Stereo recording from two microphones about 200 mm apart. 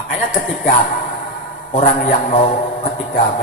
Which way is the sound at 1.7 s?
40° left (ahead or behind).